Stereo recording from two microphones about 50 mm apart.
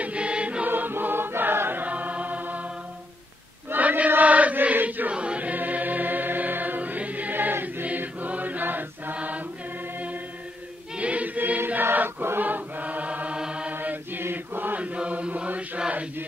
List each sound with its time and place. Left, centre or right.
0.0 s music: right
0.7 s music: right
1.9 s chant: right
3.7 s choir: right
4.1 s chant: right
4.8 s choir: right
5.1 s music: right
7.8 s choir: right
9.1 s chant: right
11.0 s choir: right
13.4 s chant: right
13.7 s chant: right
14.8 s chant: right